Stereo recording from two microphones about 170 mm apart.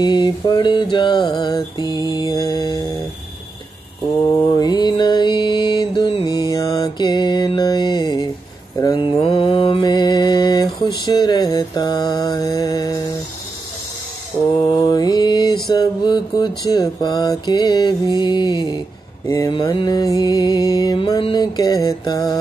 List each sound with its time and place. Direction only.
0.0 s music: 25° left (ahead or behind)
4.6 s mantra: 25° left (ahead or behind)
14.8 s mantra: 25° left (ahead or behind)
15.6 s a sound: 25° left (ahead or behind)
19.2 s music: 20° left (ahead or behind)